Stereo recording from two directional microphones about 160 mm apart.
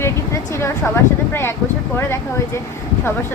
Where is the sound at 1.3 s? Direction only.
15° left (ahead or behind).